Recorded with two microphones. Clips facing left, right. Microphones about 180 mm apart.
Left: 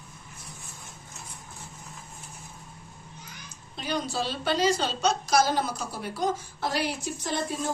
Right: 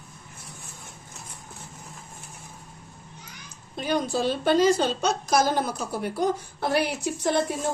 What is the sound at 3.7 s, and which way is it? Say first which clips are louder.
A woman's voice: right 5 dB; 50° right (ahead or behind).